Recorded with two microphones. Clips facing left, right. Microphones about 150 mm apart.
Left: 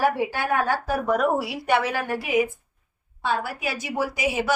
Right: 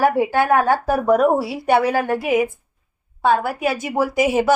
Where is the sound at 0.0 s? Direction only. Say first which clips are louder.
Right 6 dB; 50° right (ahead or behind).